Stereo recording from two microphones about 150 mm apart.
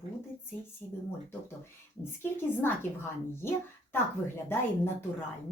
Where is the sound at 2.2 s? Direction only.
15° left (ahead or behind).